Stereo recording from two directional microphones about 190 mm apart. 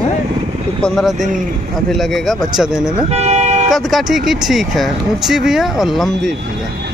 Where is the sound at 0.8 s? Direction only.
Centre (ahead or behind).